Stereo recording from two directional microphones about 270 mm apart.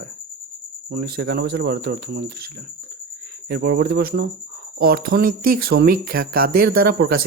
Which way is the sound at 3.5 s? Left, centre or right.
Right.